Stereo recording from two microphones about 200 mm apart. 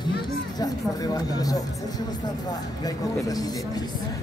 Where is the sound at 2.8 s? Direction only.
20° left (ahead or behind).